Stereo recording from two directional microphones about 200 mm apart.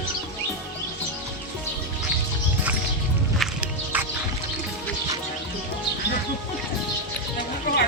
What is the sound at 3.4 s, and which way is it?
Music, 5° right (ahead or behind).